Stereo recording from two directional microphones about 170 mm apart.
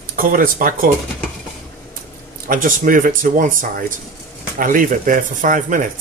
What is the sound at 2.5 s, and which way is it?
Speech, 55° right (ahead or behind).